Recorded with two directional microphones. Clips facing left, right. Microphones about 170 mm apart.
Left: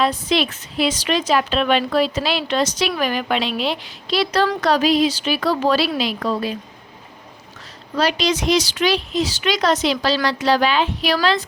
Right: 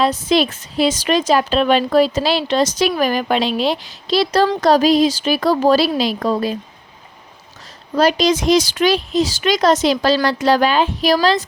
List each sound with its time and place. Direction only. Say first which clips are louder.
0.0 s a woman's voice: right 3 dB; 40° right (ahead or behind)
7.9 s speech: right 5 dB; 45° right (ahead or behind)